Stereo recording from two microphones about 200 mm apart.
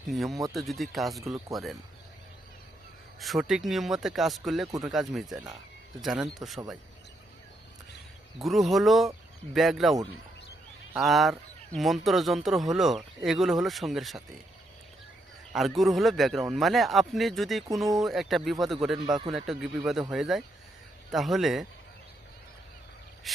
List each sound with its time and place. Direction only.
0.1 s speech: centre (ahead or behind)
3.2 s speech: centre (ahead or behind)
8.4 s speech: centre (ahead or behind)
15.5 s speech: centre (ahead or behind)
18.9 s speech: 20° right (ahead or behind)
19.3 s speech: centre (ahead or behind)
23.3 s cricket: centre (ahead or behind)